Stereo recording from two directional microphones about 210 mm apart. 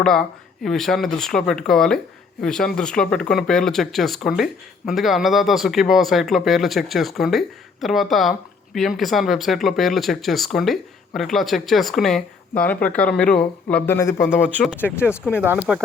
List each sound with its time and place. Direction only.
0.0 s speech: centre (ahead or behind)
15.4 s speech: 5° right (ahead or behind)